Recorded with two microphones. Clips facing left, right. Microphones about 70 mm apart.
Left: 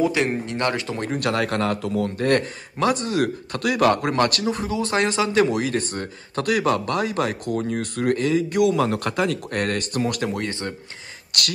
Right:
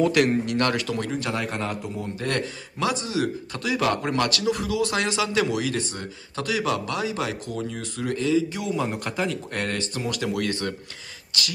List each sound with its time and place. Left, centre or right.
0.0 s a man's voice: left
1.1 s a man's voice: left
2.1 s a man's voice: left
11.3 s speech: left